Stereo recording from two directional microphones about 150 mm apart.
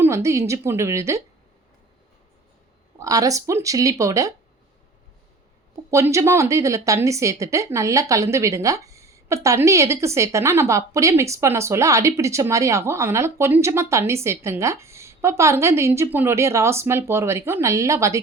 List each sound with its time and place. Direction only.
0.0 s speech: 20° right (ahead or behind)
3.0 s speech: 25° right (ahead or behind)
5.9 s speech: 20° right (ahead or behind)